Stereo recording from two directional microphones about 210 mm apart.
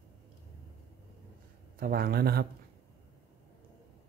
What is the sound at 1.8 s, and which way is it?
Speech, 45° right (ahead or behind).